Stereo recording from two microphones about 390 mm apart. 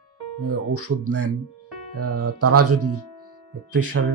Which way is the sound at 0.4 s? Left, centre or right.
Right.